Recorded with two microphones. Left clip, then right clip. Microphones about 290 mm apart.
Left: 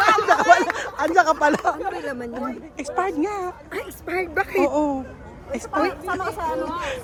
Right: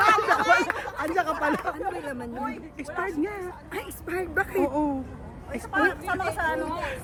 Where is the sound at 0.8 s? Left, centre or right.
Centre.